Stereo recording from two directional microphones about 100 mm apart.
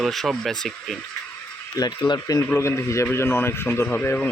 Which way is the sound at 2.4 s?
25° left (ahead or behind).